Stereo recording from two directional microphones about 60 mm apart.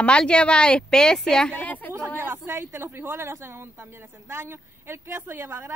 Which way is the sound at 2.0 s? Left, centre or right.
Right.